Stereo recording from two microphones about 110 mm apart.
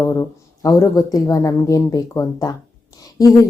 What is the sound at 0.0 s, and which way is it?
A woman's voice, 30° left (ahead or behind).